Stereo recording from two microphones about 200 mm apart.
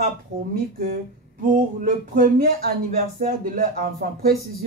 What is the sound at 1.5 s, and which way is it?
Speech, 45° right (ahead or behind).